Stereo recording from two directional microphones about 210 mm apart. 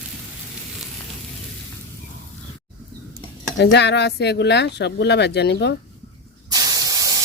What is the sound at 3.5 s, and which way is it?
Speech, 55° left (ahead or behind).